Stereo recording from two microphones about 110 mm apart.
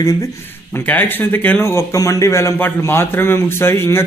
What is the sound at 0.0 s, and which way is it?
Speech, 30° left (ahead or behind).